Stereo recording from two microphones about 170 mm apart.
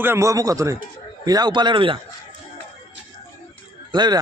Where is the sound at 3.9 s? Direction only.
25° right (ahead or behind).